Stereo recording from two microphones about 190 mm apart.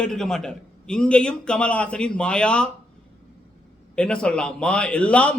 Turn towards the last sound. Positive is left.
turn(degrees=5)  # may be behind; listen again after turning